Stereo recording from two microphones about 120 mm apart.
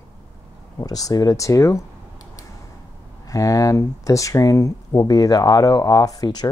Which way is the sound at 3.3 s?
30° left (ahead or behind).